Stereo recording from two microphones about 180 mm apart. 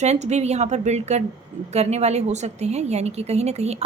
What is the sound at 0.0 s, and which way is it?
A woman's voice, 40° right (ahead or behind).